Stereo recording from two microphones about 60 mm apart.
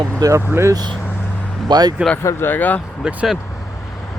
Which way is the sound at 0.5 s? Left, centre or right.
Right.